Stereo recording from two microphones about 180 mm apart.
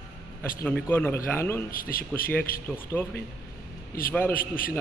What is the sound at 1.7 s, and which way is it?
Speech, 55° left (ahead or behind).